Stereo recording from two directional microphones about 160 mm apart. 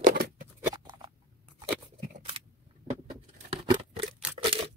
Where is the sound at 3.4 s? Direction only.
35° right (ahead or behind).